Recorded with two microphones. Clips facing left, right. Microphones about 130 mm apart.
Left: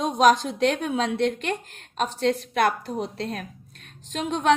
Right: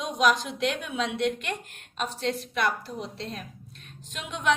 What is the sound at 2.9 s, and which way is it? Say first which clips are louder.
A woman's voice: left 6 dB; 45° left (ahead or behind).